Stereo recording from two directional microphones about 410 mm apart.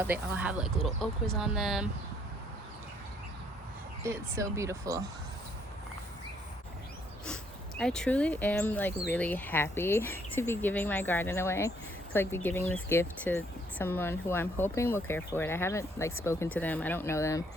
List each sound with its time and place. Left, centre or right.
0.0 s speech: centre
4.0 s speech: centre
7.8 s speech: centre